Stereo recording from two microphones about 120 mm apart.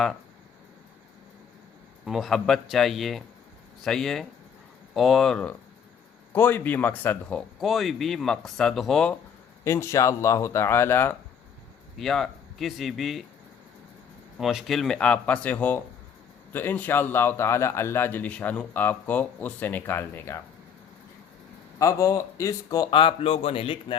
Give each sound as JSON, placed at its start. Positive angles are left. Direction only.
{"t": 2.0, "sound": "speech", "side_deg": 0}
{"t": 9.6, "sound": "speech", "side_deg": 25}
{"t": 11.9, "sound": "speech", "side_deg": 5}
{"t": 14.3, "sound": "a man's voice", "side_deg": 0}
{"t": 21.8, "sound": "speech", "side_deg": 25}
{"t": 22.9, "sound": "a man's voice", "side_deg": 45}